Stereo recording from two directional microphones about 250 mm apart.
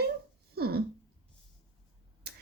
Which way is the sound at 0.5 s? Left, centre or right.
Right.